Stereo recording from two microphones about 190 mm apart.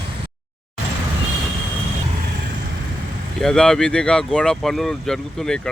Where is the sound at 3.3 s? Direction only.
Centre (ahead or behind).